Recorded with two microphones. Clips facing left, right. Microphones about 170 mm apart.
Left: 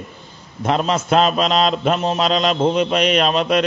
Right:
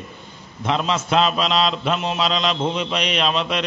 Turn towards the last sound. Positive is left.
turn(degrees=45)  # may be behind; listen again after turning